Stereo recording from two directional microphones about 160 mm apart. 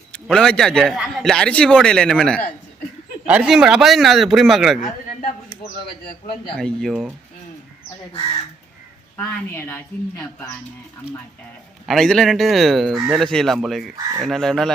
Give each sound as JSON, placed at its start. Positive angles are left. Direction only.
{"t": 0.1, "sound": "a man's voice", "side_deg": 5}
{"t": 3.2, "sound": "a man's voice", "side_deg": -5}
{"t": 6.6, "sound": "a man's voice", "side_deg": 5}
{"t": 9.1, "sound": "a woman's voice", "side_deg": 15}
{"t": 11.9, "sound": "a man's voice", "side_deg": 5}
{"t": 13.9, "sound": "speech", "side_deg": -20}
{"t": 14.3, "sound": "a man's voice", "side_deg": 0}